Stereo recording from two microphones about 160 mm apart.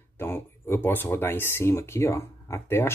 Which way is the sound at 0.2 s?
15° left (ahead or behind).